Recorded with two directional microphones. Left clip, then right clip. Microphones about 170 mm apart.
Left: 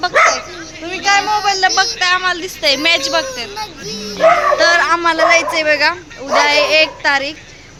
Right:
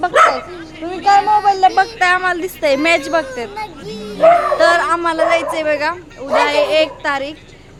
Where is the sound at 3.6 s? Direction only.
Centre (ahead or behind).